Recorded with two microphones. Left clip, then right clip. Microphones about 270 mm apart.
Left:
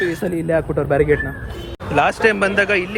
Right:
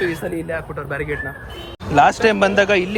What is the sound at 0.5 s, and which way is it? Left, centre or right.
Speech, centre.